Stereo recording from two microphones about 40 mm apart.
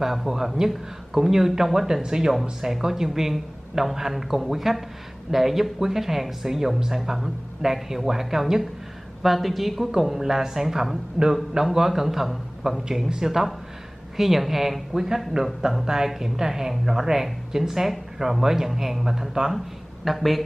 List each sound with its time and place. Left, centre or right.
0.0 s a woman's voice: centre
20.1 s a woman's voice: centre